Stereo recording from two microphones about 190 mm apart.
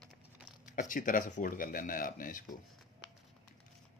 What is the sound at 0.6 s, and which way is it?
Speech, 45° left (ahead or behind).